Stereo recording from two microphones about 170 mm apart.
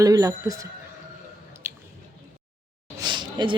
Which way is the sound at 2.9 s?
25° right (ahead or behind).